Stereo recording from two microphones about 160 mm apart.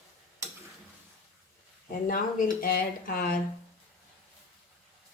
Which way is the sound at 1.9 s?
65° left (ahead or behind).